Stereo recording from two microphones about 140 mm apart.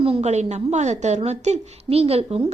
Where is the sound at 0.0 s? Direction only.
45° right (ahead or behind).